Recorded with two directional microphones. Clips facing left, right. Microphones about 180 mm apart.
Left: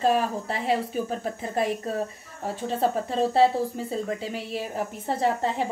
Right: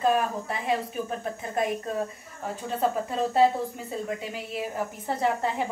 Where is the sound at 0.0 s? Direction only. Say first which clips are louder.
Left 1 dB; 30° left (ahead or behind).